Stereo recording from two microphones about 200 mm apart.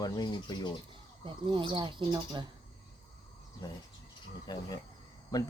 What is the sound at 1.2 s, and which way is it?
Speech, 25° right (ahead or behind).